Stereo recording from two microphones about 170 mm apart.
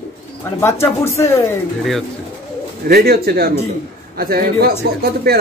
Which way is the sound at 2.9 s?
65° right (ahead or behind).